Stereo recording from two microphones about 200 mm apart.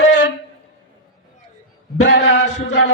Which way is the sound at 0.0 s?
60° left (ahead or behind).